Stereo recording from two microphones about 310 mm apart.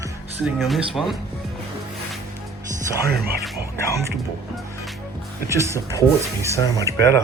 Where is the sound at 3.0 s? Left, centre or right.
Right.